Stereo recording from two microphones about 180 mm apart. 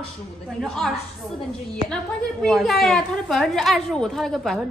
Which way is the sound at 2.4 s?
Centre (ahead or behind).